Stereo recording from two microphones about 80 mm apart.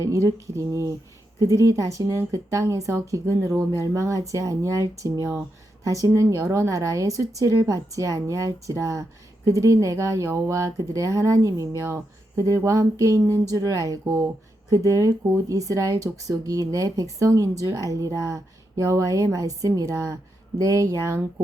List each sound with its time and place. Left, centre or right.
0.1 s a woman's voice: right